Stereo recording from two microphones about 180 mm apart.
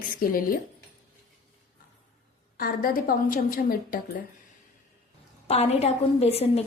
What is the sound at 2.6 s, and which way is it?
A woman's voice, 55° left (ahead or behind).